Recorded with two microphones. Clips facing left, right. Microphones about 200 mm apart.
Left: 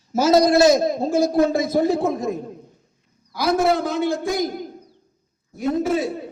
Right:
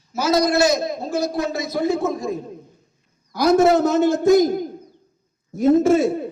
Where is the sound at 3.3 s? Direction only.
45° right (ahead or behind).